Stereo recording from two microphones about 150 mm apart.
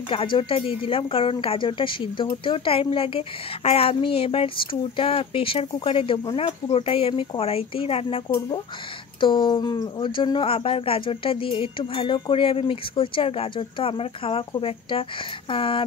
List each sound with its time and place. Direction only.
0.1 s speech: 35° left (ahead or behind)
9.2 s speech: 30° left (ahead or behind)